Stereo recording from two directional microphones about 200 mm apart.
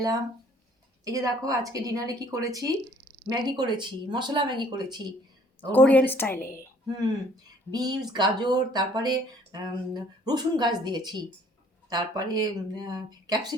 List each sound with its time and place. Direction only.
1.0 s a woman's voice: 15° right (ahead or behind)
5.7 s a woman's voice: 5° left (ahead or behind)
6.8 s speech: 20° right (ahead or behind)